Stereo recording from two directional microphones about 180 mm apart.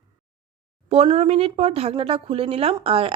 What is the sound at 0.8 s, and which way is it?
Speech, 35° right (ahead or behind).